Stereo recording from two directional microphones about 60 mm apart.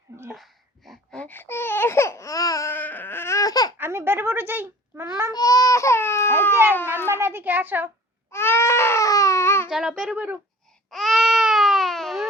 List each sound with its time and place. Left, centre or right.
0.3 s a sound: centre
1.3 s a sound: left
2.6 s baby cry: left
3.3 s baby cry: left
3.8 s a child's voice: right
5.3 s baby cry: left
6.9 s speech: right
8.3 s baby cry: left
9.0 s baby cry: left
9.6 s speech: centre
10.2 s speech: right
10.9 s baby cry: centre